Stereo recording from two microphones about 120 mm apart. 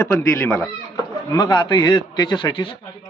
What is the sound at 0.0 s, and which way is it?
Speech, 25° left (ahead or behind).